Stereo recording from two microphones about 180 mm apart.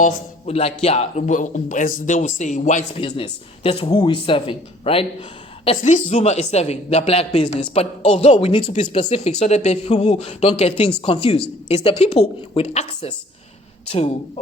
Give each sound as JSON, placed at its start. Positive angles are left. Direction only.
{"t": 0.0, "sound": "a man's voice", "side_deg": 35}
{"t": 3.0, "sound": "a man's voice", "side_deg": 30}